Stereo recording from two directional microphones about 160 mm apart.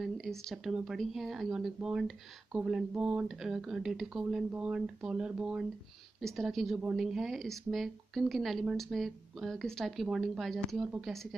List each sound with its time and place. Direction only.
0.0 s speech: centre (ahead or behind)